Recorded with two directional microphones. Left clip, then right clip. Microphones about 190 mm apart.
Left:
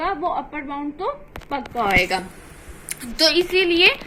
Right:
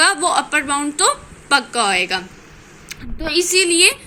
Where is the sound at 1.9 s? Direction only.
20° right (ahead or behind).